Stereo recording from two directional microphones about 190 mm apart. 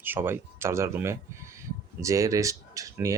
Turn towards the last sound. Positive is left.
turn(degrees=-15)  # may be behind; listen again after turning